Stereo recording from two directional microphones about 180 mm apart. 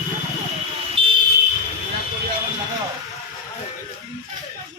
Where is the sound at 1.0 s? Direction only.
30° right (ahead or behind).